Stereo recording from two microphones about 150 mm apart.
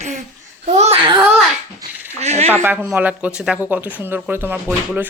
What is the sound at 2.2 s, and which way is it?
Speech, 45° right (ahead or behind).